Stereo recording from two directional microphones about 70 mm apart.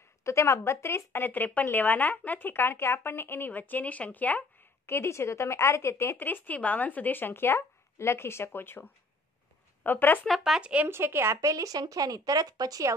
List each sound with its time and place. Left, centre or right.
0.2 s a woman's voice: left
4.8 s a woman's voice: left
6.1 s a woman's voice: left
10.2 s speech: centre
10.6 s speech: centre
10.9 s speech: right